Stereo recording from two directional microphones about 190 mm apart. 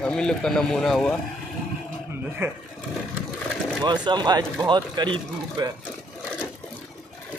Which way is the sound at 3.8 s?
25° right (ahead or behind).